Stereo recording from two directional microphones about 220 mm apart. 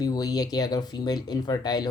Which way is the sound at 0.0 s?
15° left (ahead or behind).